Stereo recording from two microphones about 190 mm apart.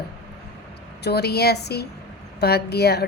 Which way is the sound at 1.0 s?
60° left (ahead or behind).